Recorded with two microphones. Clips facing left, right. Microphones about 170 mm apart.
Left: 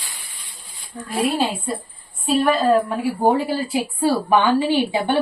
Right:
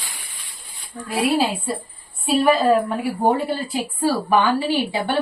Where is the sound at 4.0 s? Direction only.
20° left (ahead or behind).